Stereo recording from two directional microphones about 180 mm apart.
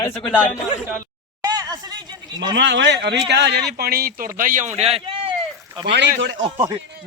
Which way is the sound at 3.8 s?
55° right (ahead or behind).